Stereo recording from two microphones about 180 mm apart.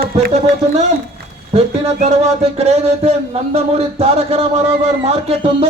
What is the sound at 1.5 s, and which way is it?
A man's voice, 35° right (ahead or behind).